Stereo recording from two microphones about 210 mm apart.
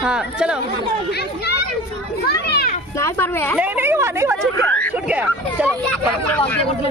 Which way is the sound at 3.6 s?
10° right (ahead or behind).